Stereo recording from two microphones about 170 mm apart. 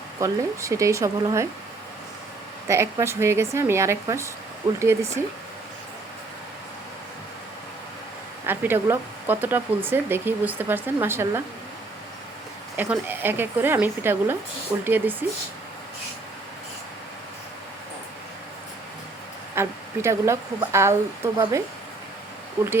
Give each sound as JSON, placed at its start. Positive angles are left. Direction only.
{"t": 0.2, "sound": "speech", "side_deg": -20}
{"t": 2.6, "sound": "speech", "side_deg": -15}
{"t": 8.4, "sound": "speech", "side_deg": -10}
{"t": 12.7, "sound": "speech", "side_deg": -10}
{"t": 19.5, "sound": "speech", "side_deg": -15}
{"t": 22.6, "sound": "speech", "side_deg": -15}